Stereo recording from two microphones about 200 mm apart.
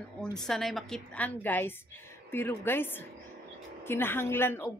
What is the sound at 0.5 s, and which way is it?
A woman's voice, centre (ahead or behind).